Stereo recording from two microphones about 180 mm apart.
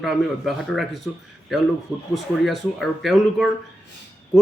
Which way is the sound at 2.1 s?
Centre (ahead or behind).